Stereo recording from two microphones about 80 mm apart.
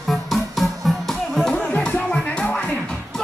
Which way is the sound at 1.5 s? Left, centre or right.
Centre.